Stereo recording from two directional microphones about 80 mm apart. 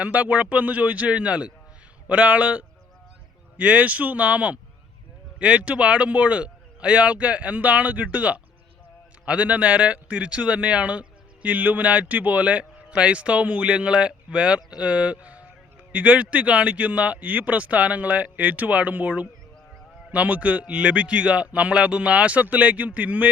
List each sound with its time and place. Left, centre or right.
0.0 s a man's voice: centre